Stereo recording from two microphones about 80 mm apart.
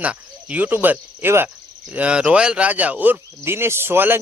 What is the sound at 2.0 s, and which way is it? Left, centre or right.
Speech, centre.